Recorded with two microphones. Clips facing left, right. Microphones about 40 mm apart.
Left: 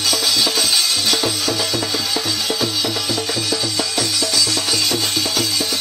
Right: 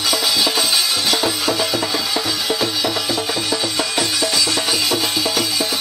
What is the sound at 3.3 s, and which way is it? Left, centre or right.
Music, right.